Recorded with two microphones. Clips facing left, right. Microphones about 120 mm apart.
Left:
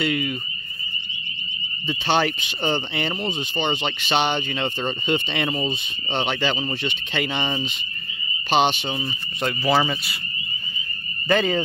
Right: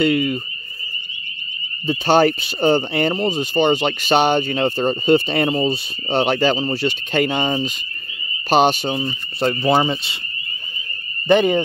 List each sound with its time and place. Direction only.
0.0 s speech: 45° right (ahead or behind)
1.9 s speech: 45° right (ahead or behind)
8.9 s speech: 30° right (ahead or behind)
11.2 s speech: 20° right (ahead or behind)